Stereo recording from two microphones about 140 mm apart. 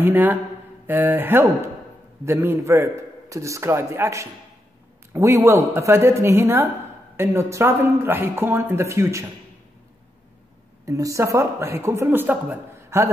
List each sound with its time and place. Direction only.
0.0 s speech: 15° right (ahead or behind)
10.9 s speech: 25° right (ahead or behind)